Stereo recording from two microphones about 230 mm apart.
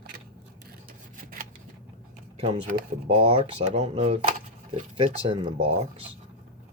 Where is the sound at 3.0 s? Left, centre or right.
Right.